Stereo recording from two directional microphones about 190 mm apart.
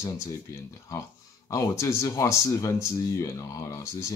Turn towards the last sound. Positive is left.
turn(degrees=15)  # may be behind; listen again after turning